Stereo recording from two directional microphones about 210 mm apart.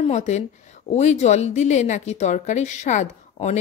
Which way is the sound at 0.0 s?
35° left (ahead or behind).